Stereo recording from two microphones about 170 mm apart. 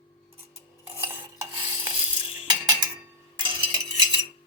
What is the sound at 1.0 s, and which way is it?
Cutlery, 10° right (ahead or behind).